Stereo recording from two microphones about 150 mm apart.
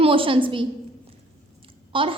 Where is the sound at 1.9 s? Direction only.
35° right (ahead or behind).